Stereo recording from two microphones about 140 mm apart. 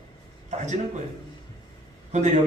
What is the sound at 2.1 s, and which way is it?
Speech, 55° right (ahead or behind).